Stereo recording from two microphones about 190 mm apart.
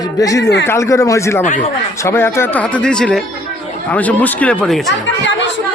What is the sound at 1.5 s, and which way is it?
Speech, 40° left (ahead or behind).